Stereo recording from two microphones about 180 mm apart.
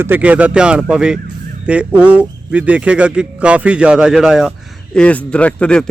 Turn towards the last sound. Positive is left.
turn(degrees=5)  # may be behind; listen again after turning